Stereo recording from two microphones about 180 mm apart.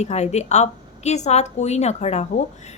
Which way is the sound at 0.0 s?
40° left (ahead or behind).